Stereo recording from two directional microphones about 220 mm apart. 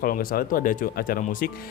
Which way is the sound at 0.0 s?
40° left (ahead or behind).